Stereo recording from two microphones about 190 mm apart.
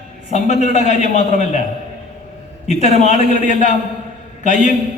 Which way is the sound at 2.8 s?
40° left (ahead or behind).